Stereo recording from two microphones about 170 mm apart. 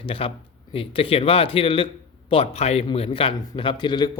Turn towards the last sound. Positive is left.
turn(degrees=25)  # may be behind; listen again after turning